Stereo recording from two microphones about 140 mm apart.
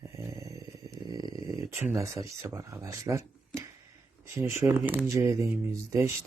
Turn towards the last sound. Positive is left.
turn(degrees=-20)  # may be behind; listen again after turning